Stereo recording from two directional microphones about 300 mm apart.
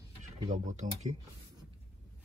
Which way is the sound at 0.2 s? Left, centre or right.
Right.